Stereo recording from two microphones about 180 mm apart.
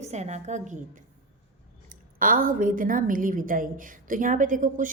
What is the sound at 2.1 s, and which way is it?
A woman's voice, 50° right (ahead or behind).